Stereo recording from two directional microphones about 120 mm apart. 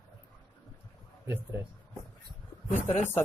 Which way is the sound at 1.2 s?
20° right (ahead or behind).